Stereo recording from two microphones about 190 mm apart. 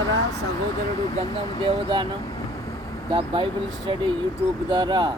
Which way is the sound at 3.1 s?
25° right (ahead or behind).